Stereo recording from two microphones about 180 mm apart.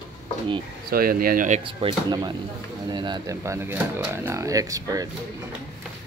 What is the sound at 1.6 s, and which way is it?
Speech, 25° right (ahead or behind).